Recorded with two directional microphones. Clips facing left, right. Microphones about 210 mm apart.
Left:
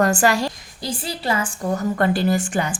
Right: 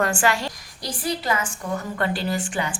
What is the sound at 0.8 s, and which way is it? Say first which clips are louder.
A woman's voice: left 1 dB; 25° left (ahead or behind).